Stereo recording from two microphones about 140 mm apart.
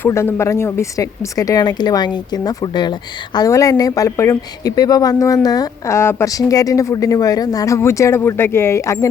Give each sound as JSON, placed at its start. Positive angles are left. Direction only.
{"t": 0.0, "sound": "speech", "side_deg": 15}